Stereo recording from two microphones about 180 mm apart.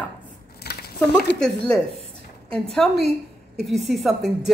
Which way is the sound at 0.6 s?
60° left (ahead or behind).